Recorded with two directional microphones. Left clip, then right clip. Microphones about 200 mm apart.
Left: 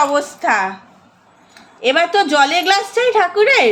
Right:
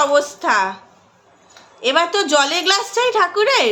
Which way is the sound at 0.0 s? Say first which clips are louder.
Even; 5° right (ahead or behind).